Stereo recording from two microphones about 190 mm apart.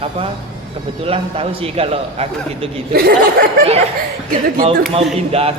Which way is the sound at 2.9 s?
55° right (ahead or behind).